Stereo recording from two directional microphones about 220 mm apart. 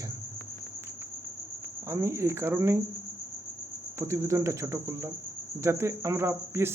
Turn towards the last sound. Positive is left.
turn(degrees=-10)  # may be behind; listen again after turning